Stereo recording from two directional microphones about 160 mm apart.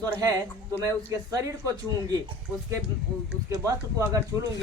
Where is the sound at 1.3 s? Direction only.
20° right (ahead or behind).